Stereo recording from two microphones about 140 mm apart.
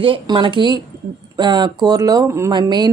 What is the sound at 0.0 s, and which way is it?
Speech, 40° right (ahead or behind).